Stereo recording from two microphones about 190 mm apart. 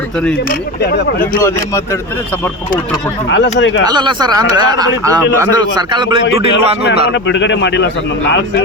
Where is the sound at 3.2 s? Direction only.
70° left (ahead or behind).